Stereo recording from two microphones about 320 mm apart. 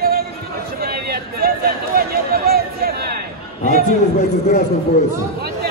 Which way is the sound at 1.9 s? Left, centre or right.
Right.